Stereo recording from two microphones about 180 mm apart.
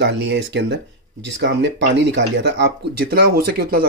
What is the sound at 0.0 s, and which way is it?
Speech, 75° right (ahead or behind).